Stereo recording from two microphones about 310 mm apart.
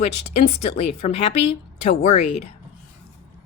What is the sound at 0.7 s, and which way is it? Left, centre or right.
A woman's voice, centre.